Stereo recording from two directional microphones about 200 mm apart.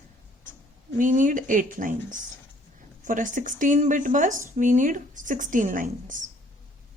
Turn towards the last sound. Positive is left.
turn(degrees=-40)  # may be behind; listen again after turning